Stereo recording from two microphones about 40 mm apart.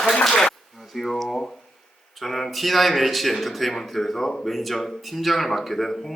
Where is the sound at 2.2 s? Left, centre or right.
Centre.